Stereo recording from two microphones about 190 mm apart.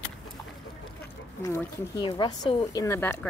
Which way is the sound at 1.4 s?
15° left (ahead or behind).